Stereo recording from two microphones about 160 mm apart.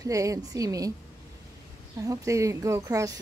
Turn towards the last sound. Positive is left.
turn(degrees=-20)  # may be behind; listen again after turning